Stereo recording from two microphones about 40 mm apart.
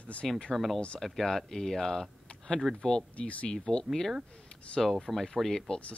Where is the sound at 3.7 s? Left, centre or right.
Centre.